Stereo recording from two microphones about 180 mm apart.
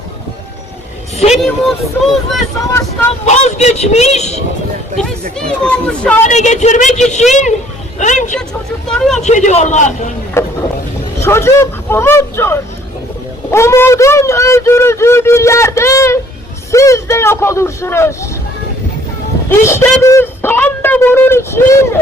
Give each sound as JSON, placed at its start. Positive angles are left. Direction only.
{"t": 1.4, "sound": "speech", "side_deg": 0}
{"t": 2.6, "sound": "speech", "side_deg": 15}
{"t": 3.2, "sound": "a woman's voice", "side_deg": 40}
{"t": 5.6, "sound": "speech", "side_deg": 5}
{"t": 6.2, "sound": "a woman's voice", "side_deg": 40}
{"t": 8.9, "sound": "speech", "side_deg": 5}
{"t": 9.2, "sound": "a woman's voice", "side_deg": 40}
{"t": 10.4, "sound": "speech", "side_deg": 15}
{"t": 19.5, "sound": "speech", "side_deg": 15}